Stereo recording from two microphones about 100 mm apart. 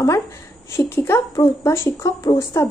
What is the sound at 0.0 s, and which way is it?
A woman's voice, 30° left (ahead or behind).